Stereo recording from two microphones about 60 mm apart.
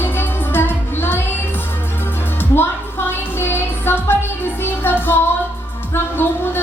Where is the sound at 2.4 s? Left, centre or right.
Left.